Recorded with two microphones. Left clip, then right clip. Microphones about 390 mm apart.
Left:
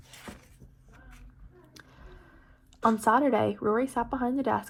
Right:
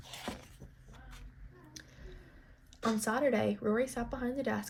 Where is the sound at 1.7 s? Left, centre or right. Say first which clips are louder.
Even; centre.